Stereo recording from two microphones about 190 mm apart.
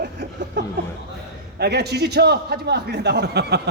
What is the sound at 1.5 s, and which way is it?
A man's voice, 60° right (ahead or behind).